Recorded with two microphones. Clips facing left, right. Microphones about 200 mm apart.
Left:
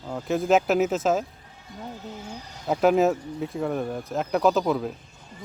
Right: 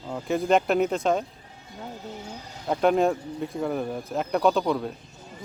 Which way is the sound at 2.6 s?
5° left (ahead or behind).